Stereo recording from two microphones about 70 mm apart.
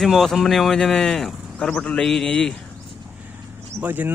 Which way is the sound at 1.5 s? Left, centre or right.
Centre.